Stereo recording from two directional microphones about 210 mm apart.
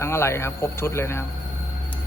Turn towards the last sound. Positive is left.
turn(degrees=10)  # may be behind; listen again after turning